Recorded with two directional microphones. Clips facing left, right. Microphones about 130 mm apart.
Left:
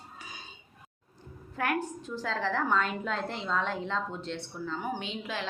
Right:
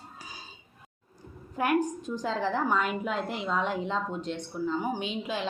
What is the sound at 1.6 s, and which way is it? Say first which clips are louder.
A woman's voice: right 5 dB; 15° right (ahead or behind).